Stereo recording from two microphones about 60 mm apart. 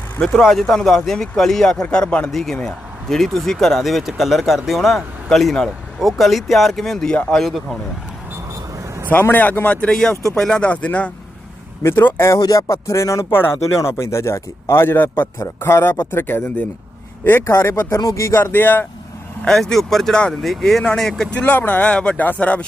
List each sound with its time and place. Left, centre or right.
0.3 s speech: centre
2.3 s speech: centre
9.0 s speech: left
9.9 s speech: centre
11.8 s speech: left
12.5 s speech: left
13.3 s a man's voice: left
13.9 s a man's voice: left
17.4 s a man's voice: left
17.9 s speech: left
18.3 s speech: left
19.5 s speech: centre
21.3 s speech: left